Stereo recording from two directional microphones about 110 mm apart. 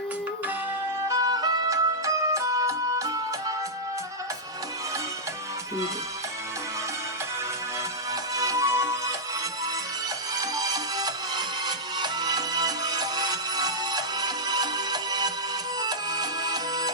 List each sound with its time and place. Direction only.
1.0 s music: 35° right (ahead or behind)
8.1 s music: 30° right (ahead or behind)
10.3 s music: 35° right (ahead or behind)